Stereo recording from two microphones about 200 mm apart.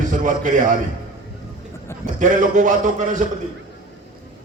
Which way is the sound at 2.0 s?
40° right (ahead or behind).